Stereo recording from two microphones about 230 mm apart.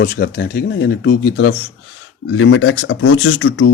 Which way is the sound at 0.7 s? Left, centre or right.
Left.